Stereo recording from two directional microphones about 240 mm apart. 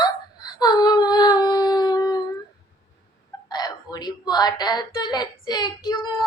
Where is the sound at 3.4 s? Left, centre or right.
Centre.